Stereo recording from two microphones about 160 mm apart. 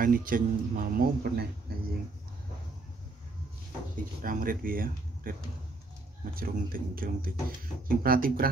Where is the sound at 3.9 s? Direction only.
60° right (ahead or behind).